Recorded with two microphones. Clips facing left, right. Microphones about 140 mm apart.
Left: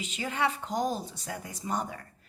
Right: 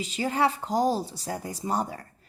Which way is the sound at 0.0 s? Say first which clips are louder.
Right 5 dB; 35° right (ahead or behind).